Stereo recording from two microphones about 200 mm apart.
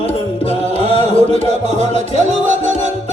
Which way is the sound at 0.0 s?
30° left (ahead or behind).